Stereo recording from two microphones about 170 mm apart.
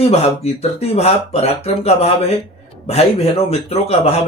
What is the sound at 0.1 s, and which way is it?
A man's voice, 40° left (ahead or behind).